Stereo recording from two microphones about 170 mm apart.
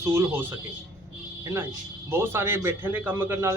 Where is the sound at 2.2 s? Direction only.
15° right (ahead or behind).